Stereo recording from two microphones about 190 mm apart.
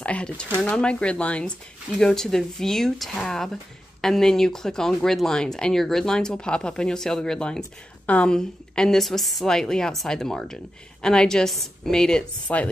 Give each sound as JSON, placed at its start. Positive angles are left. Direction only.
{"t": 0.0, "sound": "a woman's voice", "side_deg": 5}